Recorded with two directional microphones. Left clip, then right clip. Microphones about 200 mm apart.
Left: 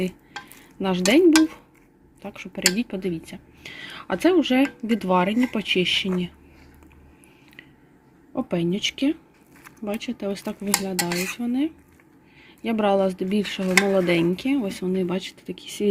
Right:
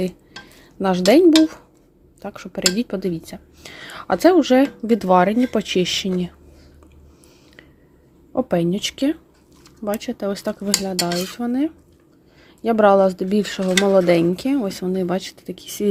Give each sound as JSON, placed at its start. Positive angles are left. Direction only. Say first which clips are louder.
{"t": 0.8, "sound": "speech", "louder": "right 5 dB", "side_deg": -15}
{"t": 2.2, "sound": "speech", "louder": "right 2 dB", "side_deg": -15}
{"t": 8.4, "sound": "speech", "louder": "right 5 dB", "side_deg": -20}